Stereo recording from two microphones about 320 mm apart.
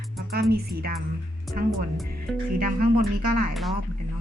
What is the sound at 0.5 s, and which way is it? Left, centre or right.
Speech, right.